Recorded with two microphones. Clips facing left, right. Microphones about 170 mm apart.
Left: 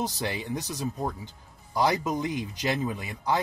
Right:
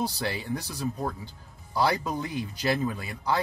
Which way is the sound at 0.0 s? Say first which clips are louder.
Even; 15° left (ahead or behind).